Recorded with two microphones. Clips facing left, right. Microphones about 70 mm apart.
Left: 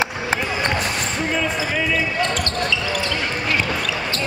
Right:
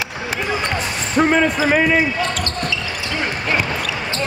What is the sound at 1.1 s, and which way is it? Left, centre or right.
Speech, right.